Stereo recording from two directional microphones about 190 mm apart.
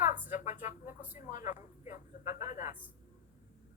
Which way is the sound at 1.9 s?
45° left (ahead or behind).